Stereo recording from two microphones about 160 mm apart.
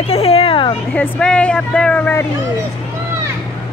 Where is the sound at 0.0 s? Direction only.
40° left (ahead or behind).